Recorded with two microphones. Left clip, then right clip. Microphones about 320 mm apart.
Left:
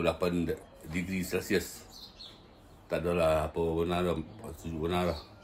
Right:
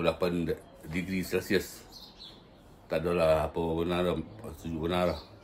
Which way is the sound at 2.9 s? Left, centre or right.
Centre.